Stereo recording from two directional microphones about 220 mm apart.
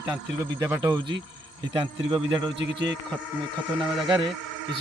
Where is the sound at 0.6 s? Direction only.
15° right (ahead or behind).